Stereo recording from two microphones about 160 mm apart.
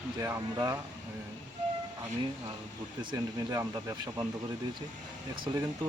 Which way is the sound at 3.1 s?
20° right (ahead or behind).